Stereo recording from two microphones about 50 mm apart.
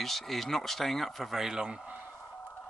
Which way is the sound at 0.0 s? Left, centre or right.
Centre.